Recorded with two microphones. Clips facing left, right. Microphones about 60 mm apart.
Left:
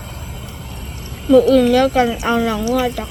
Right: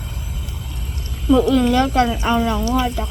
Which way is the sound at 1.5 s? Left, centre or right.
Left.